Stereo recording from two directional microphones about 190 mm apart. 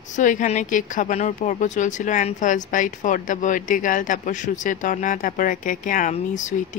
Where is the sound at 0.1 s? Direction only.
40° left (ahead or behind).